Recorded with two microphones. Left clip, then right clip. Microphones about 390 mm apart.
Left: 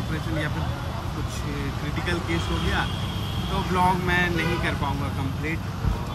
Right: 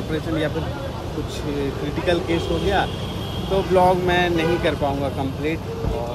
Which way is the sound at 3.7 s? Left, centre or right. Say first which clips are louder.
Right 5 dB; centre.